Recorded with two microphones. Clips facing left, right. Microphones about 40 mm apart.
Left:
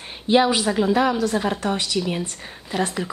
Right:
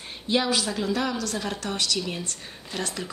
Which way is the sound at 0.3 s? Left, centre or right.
Left.